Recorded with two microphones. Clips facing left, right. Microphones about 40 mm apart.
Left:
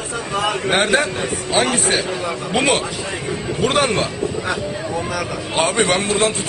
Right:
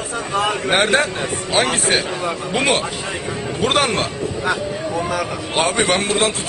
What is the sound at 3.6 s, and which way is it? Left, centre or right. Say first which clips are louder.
Speech: even; right.